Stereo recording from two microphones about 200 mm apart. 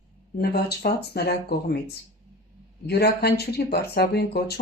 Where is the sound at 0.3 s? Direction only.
50° left (ahead or behind).